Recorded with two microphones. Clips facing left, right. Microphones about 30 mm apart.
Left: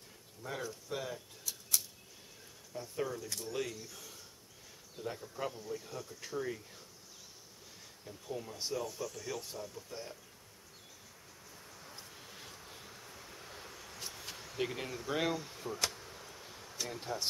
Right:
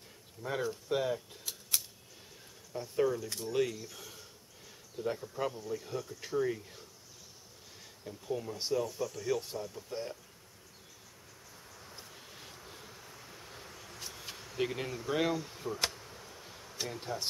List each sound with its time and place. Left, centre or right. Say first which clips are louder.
0.5 s speech: right 7 dB; right
2.7 s speech: right 7 dB; centre
8.0 s speech: right 5 dB; centre
9.4 s speech: right 4 dB; centre
11.7 s vehicle: right 1 dB; centre
14.2 s speech: right 3 dB; centre
15.9 s a sound: even; centre
16.8 s speech: right 1 dB; centre